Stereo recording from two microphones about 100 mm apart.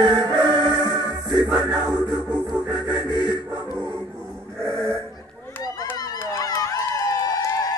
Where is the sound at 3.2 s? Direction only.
45° right (ahead or behind).